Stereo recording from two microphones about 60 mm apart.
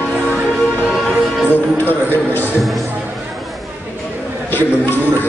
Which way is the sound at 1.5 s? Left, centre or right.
Right.